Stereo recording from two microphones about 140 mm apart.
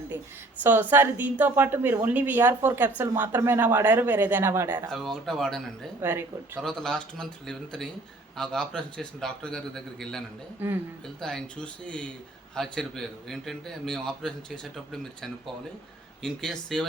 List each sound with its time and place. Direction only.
0.6 s a woman's voice: 15° right (ahead or behind)
4.9 s a man's voice: centre (ahead or behind)
6.0 s a woman's voice: 15° right (ahead or behind)
6.6 s a man's voice: 5° left (ahead or behind)
10.6 s a woman's voice: 15° right (ahead or behind)
11.2 s a man's voice: 5° left (ahead or behind)
16.2 s a man's voice: 5° left (ahead or behind)